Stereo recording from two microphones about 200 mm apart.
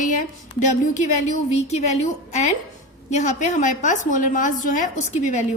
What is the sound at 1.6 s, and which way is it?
A woman's voice, 35° left (ahead or behind).